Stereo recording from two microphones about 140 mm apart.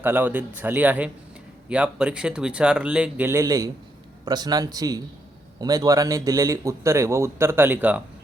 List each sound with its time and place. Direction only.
0.0 s speech: 15° right (ahead or behind)